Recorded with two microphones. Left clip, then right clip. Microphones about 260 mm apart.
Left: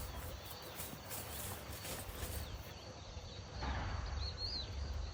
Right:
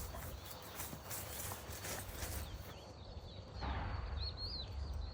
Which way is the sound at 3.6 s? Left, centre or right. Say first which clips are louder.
Left 1 dB; left.